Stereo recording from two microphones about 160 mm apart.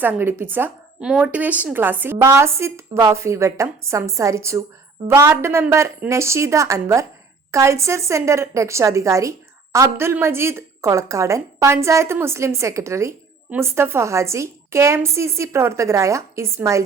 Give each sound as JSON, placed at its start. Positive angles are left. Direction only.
{"t": 0.0, "sound": "speech", "side_deg": -10}